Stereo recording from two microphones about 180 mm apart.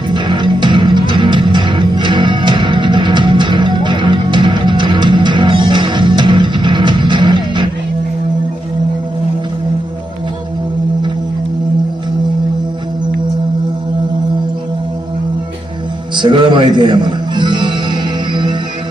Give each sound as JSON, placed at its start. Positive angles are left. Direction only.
{"t": 0.1, "sound": "music", "side_deg": -25}
{"t": 16.1, "sound": "music", "side_deg": -25}